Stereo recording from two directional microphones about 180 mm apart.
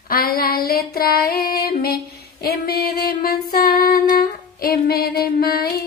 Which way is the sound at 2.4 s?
60° left (ahead or behind).